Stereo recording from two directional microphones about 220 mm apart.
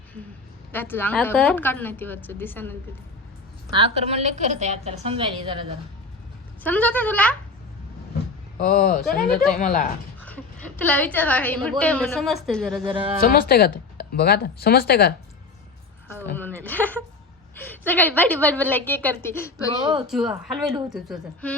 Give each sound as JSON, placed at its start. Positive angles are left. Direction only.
{"t": 0.7, "sound": "a woman's voice", "side_deg": 10}
{"t": 3.8, "sound": "a woman's voice", "side_deg": -25}
{"t": 6.6, "sound": "a woman's voice", "side_deg": 5}
{"t": 8.5, "sound": "speech", "side_deg": 40}
{"t": 10.2, "sound": "a woman's voice", "side_deg": 5}
{"t": 12.8, "sound": "a woman's voice", "side_deg": -25}
{"t": 13.1, "sound": "speech", "side_deg": 40}
{"t": 16.0, "sound": "a woman's voice", "side_deg": 10}
{"t": 19.8, "sound": "a woman's voice", "side_deg": -20}
{"t": 20.1, "sound": "speech", "side_deg": 0}